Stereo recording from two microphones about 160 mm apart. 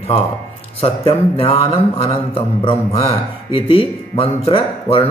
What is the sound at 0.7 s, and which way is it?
Speech, 35° left (ahead or behind).